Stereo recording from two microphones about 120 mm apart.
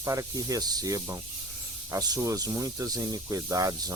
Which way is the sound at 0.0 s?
30° right (ahead or behind).